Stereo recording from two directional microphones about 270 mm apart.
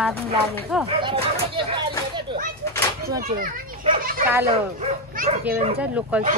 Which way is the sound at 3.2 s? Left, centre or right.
Right.